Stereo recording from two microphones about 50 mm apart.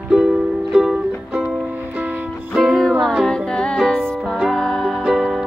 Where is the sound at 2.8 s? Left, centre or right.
Centre.